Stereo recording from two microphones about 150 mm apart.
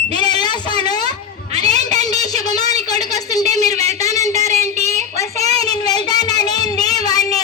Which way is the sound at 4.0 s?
20° left (ahead or behind).